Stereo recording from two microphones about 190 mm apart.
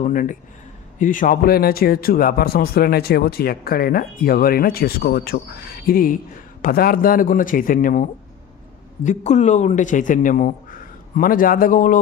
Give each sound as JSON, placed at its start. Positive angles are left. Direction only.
{"t": 0.0, "sound": "speech", "side_deg": 45}
{"t": 9.0, "sound": "a man's voice", "side_deg": 35}